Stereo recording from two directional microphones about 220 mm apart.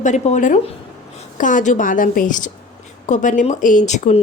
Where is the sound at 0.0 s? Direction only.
35° left (ahead or behind).